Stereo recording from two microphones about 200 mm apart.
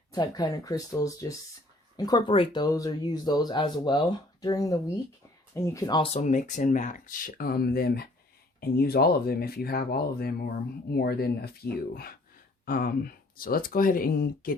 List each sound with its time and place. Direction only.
0.1 s speech: 20° left (ahead or behind); by 14.5 s 45° left (ahead or behind)